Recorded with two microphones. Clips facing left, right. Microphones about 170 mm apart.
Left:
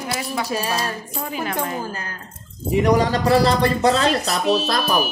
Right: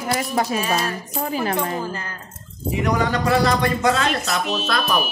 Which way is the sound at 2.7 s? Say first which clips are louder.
Left 4 dB; 35° left (ahead or behind).